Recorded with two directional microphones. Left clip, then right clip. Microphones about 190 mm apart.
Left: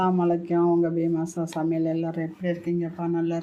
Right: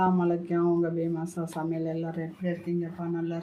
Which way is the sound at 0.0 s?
25° left (ahead or behind).